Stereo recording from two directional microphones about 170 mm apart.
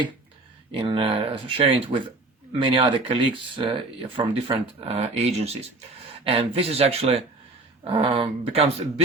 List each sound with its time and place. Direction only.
0.7 s speech: 30° right (ahead or behind)